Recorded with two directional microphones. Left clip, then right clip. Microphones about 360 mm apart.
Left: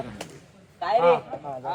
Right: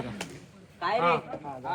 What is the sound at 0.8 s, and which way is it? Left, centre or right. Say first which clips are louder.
Speech: left 5 dB; left.